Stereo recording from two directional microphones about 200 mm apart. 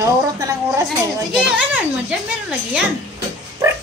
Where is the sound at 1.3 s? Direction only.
5° right (ahead or behind).